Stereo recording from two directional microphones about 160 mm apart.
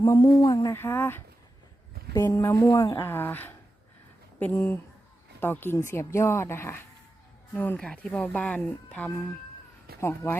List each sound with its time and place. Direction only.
0.0 s speech: 20° left (ahead or behind)